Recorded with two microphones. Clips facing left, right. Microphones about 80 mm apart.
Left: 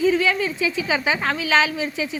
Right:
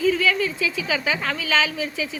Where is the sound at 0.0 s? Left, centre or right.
Centre.